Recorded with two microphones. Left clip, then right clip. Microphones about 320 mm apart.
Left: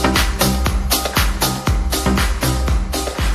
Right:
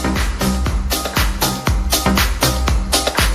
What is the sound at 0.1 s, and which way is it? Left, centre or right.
Music, centre.